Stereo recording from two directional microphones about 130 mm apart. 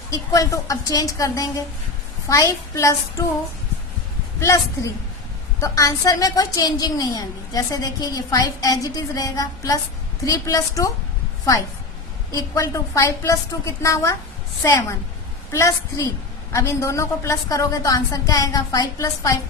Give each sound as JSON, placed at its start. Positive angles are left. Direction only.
{"t": 0.1, "sound": "a woman's voice", "side_deg": 30}
{"t": 4.4, "sound": "a woman's voice", "side_deg": 25}
{"t": 12.3, "sound": "a woman's voice", "side_deg": 25}